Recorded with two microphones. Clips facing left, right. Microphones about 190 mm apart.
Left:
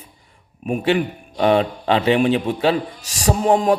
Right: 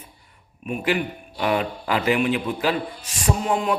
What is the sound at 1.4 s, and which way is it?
Speech, 30° left (ahead or behind).